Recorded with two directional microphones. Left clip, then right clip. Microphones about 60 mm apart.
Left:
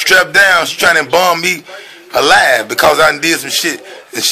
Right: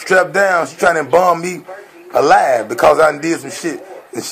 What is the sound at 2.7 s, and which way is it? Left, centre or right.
Speech, left.